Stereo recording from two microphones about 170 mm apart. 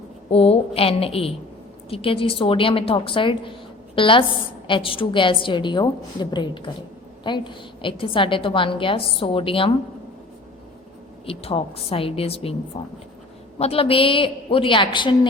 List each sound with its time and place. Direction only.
0.3 s a woman's voice: 35° left (ahead or behind)
11.3 s a woman's voice: 35° left (ahead or behind)